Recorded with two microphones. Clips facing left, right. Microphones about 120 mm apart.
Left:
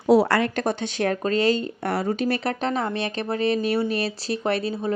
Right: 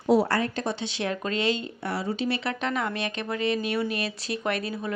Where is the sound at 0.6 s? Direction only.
50° left (ahead or behind).